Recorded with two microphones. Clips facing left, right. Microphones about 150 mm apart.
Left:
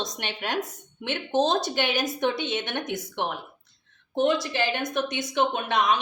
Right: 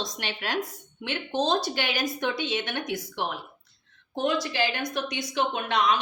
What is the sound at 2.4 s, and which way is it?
Speech, 50° left (ahead or behind).